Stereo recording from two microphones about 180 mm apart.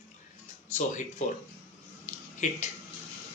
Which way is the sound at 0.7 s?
45° left (ahead or behind).